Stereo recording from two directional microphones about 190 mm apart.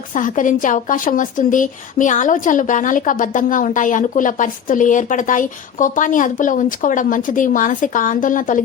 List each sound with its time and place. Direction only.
0.1 s a woman's voice: 45° left (ahead or behind)